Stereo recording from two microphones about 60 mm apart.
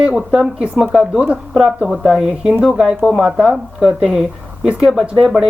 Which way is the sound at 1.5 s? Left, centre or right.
Centre.